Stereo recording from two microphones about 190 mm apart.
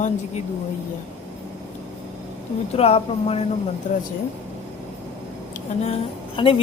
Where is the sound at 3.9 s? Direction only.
40° left (ahead or behind).